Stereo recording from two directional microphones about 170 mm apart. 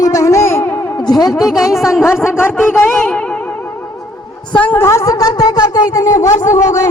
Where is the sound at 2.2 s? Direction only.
15° left (ahead or behind).